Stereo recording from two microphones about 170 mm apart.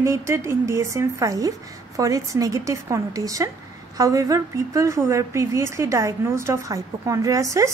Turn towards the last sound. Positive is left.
turn(degrees=-20)  # may be behind; listen again after turning